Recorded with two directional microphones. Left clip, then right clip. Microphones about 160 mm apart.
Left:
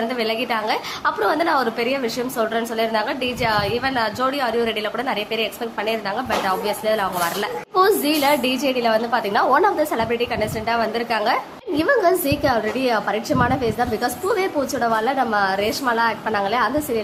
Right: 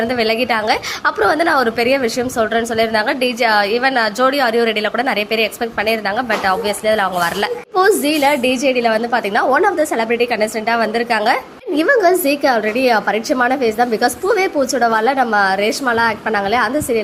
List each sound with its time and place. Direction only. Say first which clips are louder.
0.2 s a woman's voice: right 7 dB; 25° right (ahead or behind)